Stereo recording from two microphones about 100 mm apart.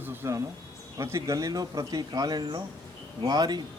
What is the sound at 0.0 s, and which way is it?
Speech, 20° right (ahead or behind).